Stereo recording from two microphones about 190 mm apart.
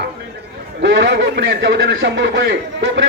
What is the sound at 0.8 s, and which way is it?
A man's voice, 70° right (ahead or behind).